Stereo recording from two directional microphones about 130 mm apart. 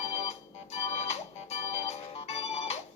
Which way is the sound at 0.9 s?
55° left (ahead or behind).